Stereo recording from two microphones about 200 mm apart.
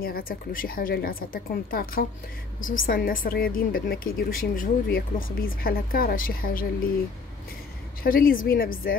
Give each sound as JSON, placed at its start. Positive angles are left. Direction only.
{"t": 0.0, "sound": "a woman's voice", "side_deg": 45}
{"t": 8.0, "sound": "a woman's voice", "side_deg": 45}